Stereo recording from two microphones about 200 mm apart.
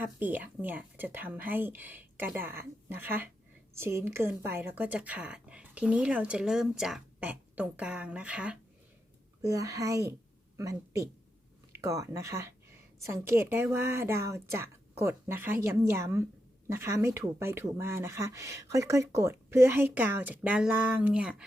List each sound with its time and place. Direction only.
0.0 s a woman's voice: 10° right (ahead or behind)
9.4 s a woman's voice: 15° right (ahead or behind)